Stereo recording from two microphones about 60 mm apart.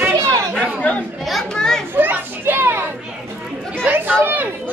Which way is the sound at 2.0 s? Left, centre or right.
Right.